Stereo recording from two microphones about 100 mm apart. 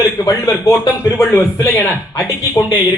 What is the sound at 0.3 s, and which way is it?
A man's voice, 30° left (ahead or behind).